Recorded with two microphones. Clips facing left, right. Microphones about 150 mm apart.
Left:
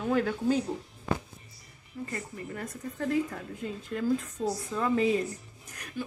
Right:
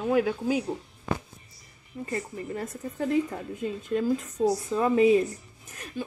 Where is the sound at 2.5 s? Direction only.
20° right (ahead or behind).